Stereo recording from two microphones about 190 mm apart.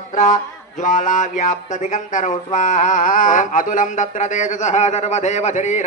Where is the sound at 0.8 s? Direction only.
40° left (ahead or behind).